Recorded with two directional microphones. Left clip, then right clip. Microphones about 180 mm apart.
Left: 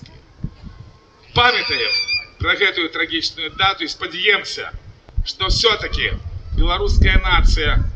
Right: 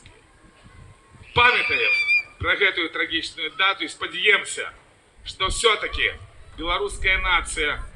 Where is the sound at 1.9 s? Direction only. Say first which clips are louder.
Even; 80° left.